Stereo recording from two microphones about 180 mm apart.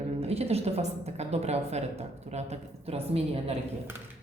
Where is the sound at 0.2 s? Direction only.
35° right (ahead or behind).